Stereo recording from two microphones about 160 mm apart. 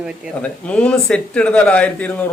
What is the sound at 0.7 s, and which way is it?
Speech, 10° left (ahead or behind).